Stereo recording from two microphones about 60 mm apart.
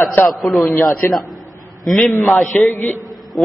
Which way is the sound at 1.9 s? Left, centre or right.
Centre.